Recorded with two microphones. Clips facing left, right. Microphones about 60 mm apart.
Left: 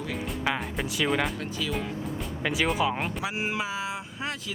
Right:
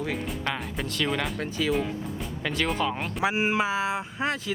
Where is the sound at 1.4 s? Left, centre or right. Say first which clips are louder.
Right 4 dB; right.